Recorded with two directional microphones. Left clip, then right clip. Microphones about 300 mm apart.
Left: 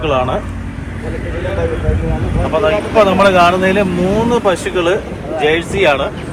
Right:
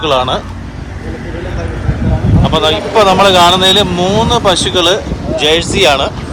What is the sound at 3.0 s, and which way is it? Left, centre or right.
Speech, centre.